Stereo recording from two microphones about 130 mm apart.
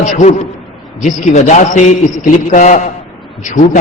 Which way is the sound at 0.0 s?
65° left (ahead or behind).